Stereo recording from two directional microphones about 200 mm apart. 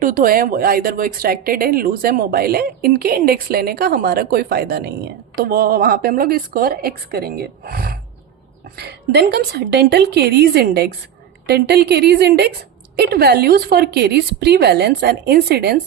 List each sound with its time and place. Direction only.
0.0 s a woman's voice: 45° right (ahead or behind)